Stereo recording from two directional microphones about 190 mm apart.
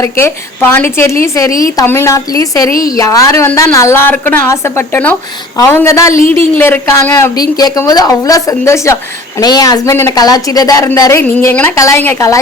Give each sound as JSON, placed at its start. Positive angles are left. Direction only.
{"t": 0.0, "sound": "speech", "side_deg": 10}
{"t": 5.5, "sound": "speech", "side_deg": 15}